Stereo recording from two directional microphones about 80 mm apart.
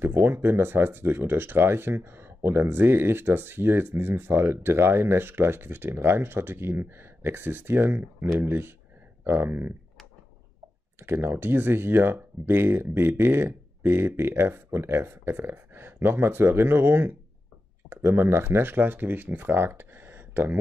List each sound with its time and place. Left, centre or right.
0.0 s speech: right
11.0 s speech: right